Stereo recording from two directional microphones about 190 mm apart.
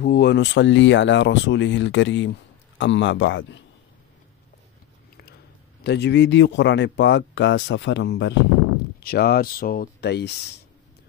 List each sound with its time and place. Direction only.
0.0 s speech: 55° left (ahead or behind); by 3.6 s 75° left (ahead or behind)
5.9 s speech: 65° left (ahead or behind)
9.0 s speech: 55° left (ahead or behind)